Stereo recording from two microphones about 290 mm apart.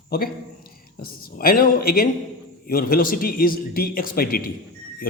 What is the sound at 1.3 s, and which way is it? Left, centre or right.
A man's voice, left.